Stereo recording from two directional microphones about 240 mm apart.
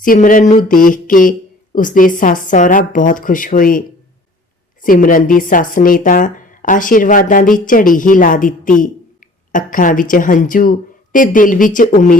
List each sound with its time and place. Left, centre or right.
0.0 s speech: left